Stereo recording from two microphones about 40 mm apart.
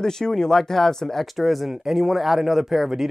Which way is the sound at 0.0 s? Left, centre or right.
Centre.